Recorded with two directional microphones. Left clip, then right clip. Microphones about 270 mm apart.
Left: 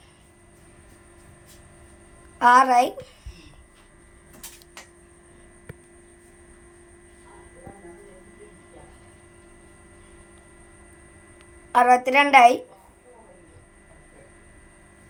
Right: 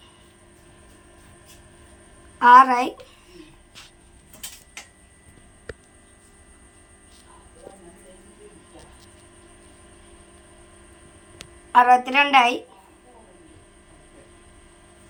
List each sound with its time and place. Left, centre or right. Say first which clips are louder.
2.4 s a woman's voice: right 3 dB; centre
11.7 s a woman's voice: right 2 dB; centre